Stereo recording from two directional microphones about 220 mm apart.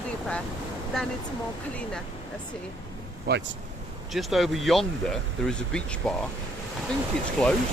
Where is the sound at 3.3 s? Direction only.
45° right (ahead or behind).